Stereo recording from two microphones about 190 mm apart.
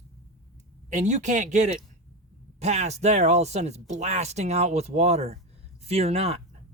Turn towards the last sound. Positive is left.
turn(degrees=-35)  # may be behind; listen again after turning